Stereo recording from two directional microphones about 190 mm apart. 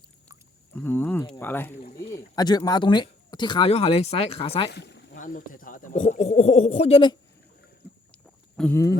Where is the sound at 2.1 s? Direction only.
20° left (ahead or behind).